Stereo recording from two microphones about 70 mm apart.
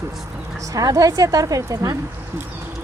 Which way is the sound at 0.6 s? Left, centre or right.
Right.